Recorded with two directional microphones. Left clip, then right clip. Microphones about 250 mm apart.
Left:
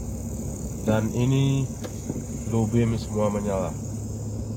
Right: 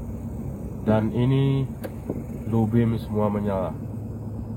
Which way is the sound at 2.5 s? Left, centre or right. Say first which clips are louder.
Right 1 dB; centre.